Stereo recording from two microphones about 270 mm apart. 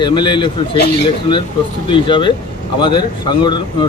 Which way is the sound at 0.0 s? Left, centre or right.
Centre.